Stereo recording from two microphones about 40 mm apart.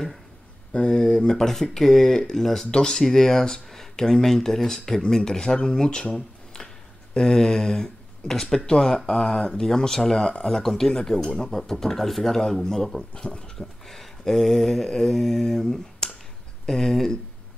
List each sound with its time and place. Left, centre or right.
0.7 s speech: left
1.3 s speech: centre
7.2 s speech: centre
13.1 s speech: left
13.6 s a sound: centre
16.6 s speech: centre